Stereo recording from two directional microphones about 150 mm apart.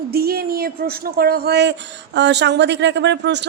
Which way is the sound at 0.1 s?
90° right.